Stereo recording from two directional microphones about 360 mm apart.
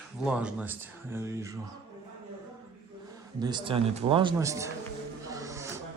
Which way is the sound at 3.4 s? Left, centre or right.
Centre.